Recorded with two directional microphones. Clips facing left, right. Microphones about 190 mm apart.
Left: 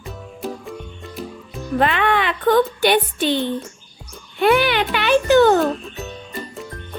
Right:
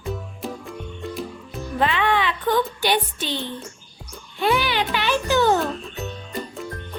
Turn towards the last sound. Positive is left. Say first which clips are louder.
# right 1 dB
turn(degrees=0)  # may be behind; listen again after turning